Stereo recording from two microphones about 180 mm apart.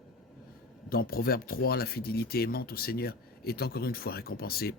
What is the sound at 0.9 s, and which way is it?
Speech, 55° left (ahead or behind).